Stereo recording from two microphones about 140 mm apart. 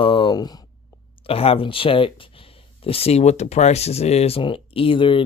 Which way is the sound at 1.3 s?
45° left (ahead or behind).